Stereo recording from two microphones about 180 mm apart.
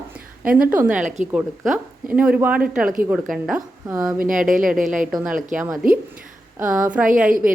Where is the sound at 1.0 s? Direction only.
40° right (ahead or behind).